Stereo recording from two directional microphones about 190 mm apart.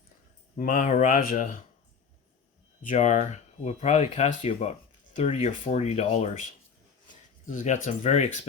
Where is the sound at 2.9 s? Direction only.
40° left (ahead or behind).